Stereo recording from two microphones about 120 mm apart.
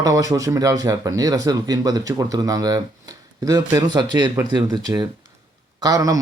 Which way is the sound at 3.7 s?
35° right (ahead or behind).